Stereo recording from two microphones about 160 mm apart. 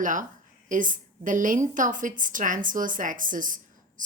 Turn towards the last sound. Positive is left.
turn(degrees=-55)  # may be behind; listen again after turning